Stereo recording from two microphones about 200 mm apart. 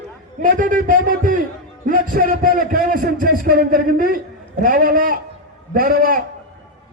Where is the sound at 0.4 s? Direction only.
45° right (ahead or behind).